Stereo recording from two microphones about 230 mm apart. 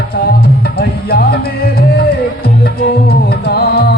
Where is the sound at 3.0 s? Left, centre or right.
Left.